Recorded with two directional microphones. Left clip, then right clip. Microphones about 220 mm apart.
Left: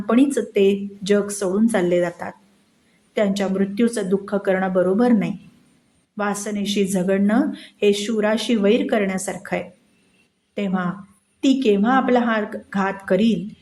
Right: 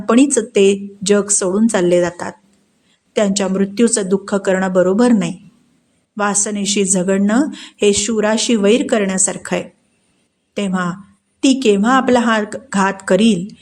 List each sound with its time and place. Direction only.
0.0 s speech: 25° right (ahead or behind)